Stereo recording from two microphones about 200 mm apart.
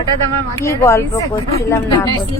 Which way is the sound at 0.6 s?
15° left (ahead or behind).